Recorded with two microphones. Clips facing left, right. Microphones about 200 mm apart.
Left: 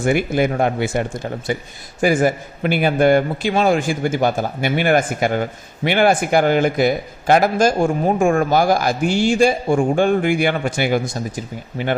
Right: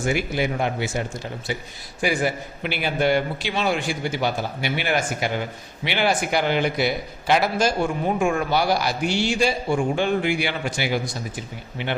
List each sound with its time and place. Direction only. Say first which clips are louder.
0.0 s a man's voice: left 6 dB; 55° left (ahead or behind)